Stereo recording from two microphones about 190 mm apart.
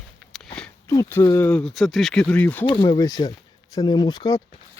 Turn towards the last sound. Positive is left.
turn(degrees=20)  # may be behind; listen again after turning